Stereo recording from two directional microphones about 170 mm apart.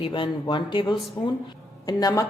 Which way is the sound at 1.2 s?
15° left (ahead or behind).